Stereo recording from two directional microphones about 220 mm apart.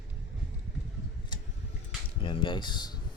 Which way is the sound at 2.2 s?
20° left (ahead or behind).